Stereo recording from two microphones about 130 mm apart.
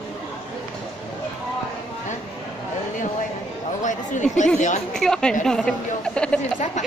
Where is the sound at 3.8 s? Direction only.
70° left (ahead or behind).